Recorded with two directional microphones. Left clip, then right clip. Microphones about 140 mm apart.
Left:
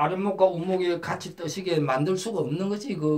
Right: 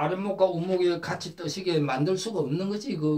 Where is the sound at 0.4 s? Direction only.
40° left (ahead or behind).